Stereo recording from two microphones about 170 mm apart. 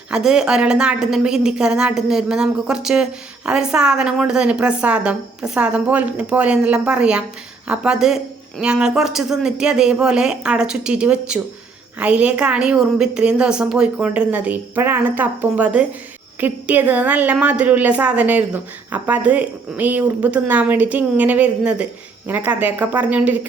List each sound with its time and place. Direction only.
0.1 s a woman's voice: 5° right (ahead or behind)